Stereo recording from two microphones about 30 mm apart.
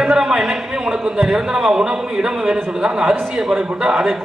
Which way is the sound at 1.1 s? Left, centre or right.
Centre.